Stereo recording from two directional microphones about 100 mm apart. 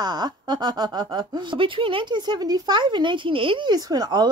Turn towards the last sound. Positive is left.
turn(degrees=-45)  # may be behind; listen again after turning